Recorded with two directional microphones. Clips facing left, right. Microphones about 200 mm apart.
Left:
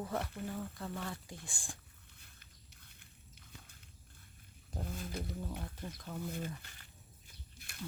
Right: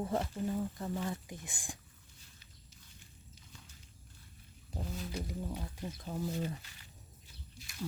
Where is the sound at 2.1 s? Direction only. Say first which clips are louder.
Right 3 dB; 60° left (ahead or behind).